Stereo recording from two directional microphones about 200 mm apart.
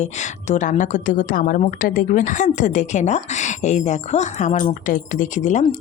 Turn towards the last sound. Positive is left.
turn(degrees=40)  # may be behind; listen again after turning